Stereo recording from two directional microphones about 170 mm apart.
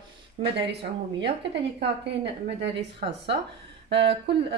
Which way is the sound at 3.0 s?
50° right (ahead or behind).